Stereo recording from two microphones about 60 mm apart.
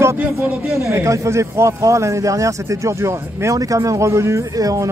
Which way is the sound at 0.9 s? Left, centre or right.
Right.